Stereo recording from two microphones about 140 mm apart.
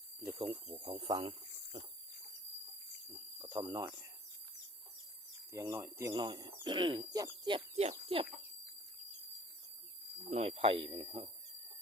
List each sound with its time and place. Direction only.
0.3 s speech: 40° right (ahead or behind)
1.7 s a sound: 55° right (ahead or behind)
3.3 s speech: 30° right (ahead or behind)
5.5 s speech: 20° right (ahead or behind)
7.8 s speech: 45° right (ahead or behind)
10.2 s speech: 45° right (ahead or behind)